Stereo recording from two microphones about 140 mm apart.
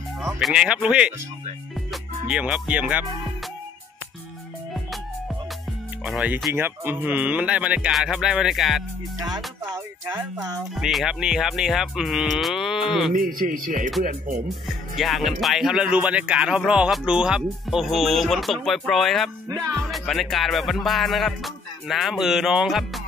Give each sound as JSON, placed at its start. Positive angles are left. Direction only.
{"t": 0.2, "sound": "speech", "side_deg": 0}
{"t": 1.9, "sound": "music", "side_deg": -10}
{"t": 6.0, "sound": "speech", "side_deg": -10}
{"t": 10.0, "sound": "speech", "side_deg": -25}
{"t": 10.7, "sound": "speech", "side_deg": 0}
{"t": 13.1, "sound": "speech", "side_deg": -85}
{"t": 14.0, "sound": "speech", "side_deg": -65}
{"t": 14.7, "sound": "speech", "side_deg": 0}
{"t": 19.5, "sound": "speech", "side_deg": -25}
{"t": 19.8, "sound": "speech", "side_deg": 0}